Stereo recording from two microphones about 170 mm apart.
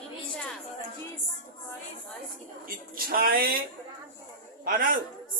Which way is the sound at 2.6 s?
60° right (ahead or behind).